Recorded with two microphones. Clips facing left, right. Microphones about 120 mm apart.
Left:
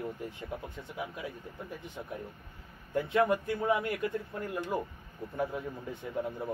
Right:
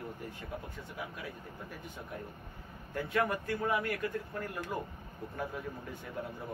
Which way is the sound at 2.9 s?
20° left (ahead or behind).